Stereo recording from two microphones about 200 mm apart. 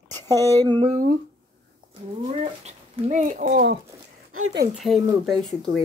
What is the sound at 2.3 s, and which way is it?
Speech, 30° right (ahead or behind).